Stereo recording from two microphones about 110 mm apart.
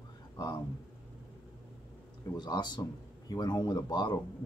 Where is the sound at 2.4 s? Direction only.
40° left (ahead or behind).